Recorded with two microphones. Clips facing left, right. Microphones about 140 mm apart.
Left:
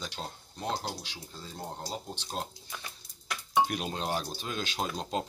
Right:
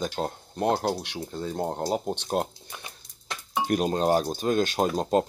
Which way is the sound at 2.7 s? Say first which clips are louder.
Right 1 dB; 25° right (ahead or behind).